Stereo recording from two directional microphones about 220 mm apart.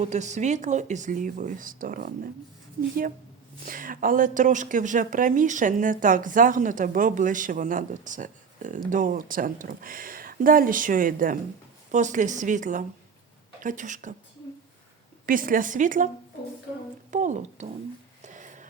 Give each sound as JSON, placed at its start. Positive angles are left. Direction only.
{"t": 0.0, "sound": "speech", "side_deg": -30}
{"t": 3.7, "sound": "speech", "side_deg": -40}
{"t": 15.3, "sound": "speech", "side_deg": -40}
{"t": 17.1, "sound": "speech", "side_deg": -35}
{"t": 18.2, "sound": "a sound", "side_deg": -35}